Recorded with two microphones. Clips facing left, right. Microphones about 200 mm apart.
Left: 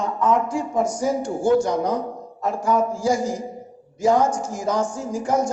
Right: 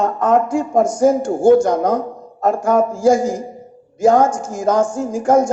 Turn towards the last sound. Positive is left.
turn(degrees=-50)  # may be behind; listen again after turning